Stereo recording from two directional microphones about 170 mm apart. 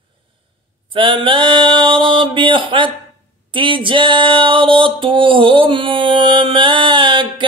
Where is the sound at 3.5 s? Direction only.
30° right (ahead or behind).